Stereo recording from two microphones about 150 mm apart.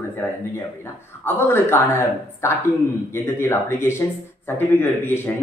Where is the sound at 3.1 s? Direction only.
15° left (ahead or behind).